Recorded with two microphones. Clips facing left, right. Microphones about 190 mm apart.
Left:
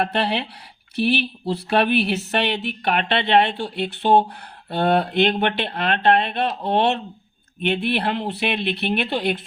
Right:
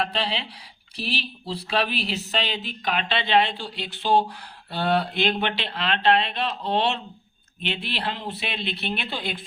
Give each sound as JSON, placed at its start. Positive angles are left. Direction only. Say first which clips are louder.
{"t": 0.0, "sound": "speech", "louder": "left 5 dB", "side_deg": 60}